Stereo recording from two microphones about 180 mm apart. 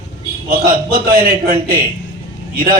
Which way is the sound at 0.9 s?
50° right (ahead or behind).